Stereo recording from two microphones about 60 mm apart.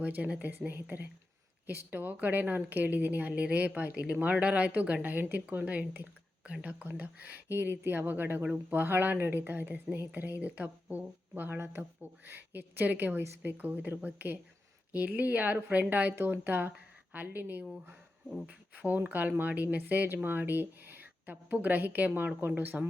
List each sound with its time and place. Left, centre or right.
0.0 s a woman's voice: right